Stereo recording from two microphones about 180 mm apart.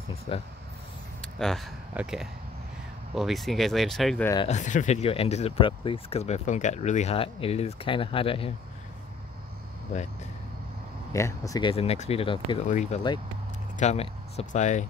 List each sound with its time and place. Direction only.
2.0 s speech: 5° right (ahead or behind)
4.5 s speech: 40° left (ahead or behind)
11.1 s speech: 15° left (ahead or behind)
11.7 s speech: 35° left (ahead or behind)
12.6 s speech: 45° left (ahead or behind)